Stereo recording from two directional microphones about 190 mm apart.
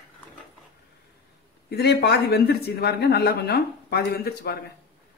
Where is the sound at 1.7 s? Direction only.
60° left (ahead or behind).